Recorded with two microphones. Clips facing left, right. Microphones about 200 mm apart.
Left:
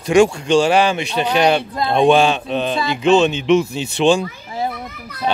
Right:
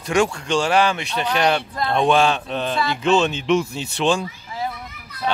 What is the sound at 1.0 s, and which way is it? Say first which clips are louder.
Speech: left 4 dB; 30° left (ahead or behind).